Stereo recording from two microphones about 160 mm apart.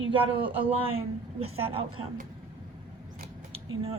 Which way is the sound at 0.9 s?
35° right (ahead or behind).